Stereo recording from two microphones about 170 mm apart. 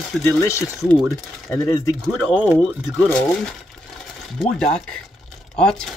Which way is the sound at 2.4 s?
10° right (ahead or behind).